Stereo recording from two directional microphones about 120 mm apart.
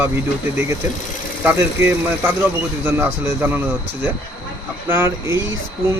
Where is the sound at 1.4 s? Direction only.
15° right (ahead or behind).